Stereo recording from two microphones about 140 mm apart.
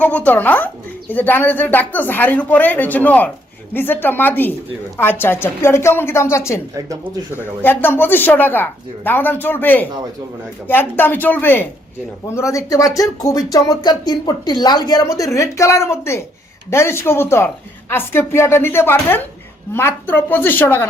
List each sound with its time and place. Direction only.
0.0 s speech: 10° left (ahead or behind)